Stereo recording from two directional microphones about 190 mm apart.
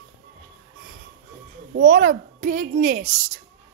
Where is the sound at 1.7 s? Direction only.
70° right (ahead or behind).